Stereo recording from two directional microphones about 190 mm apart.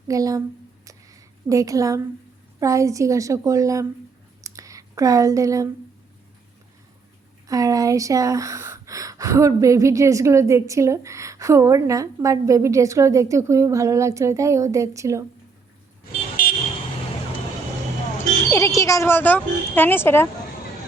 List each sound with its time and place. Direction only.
0.1 s speech: 15° right (ahead or behind)
0.9 s a sound: 15° right (ahead or behind)
2.6 s speech: 15° right (ahead or behind)
4.4 s a sound: 15° right (ahead or behind)
7.4 s speech: 20° right (ahead or behind)
16.4 s vehicle: 45° left (ahead or behind)
18.5 s a woman's voice: 15° left (ahead or behind)